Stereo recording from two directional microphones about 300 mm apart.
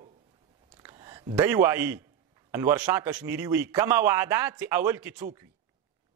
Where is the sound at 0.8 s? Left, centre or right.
Centre.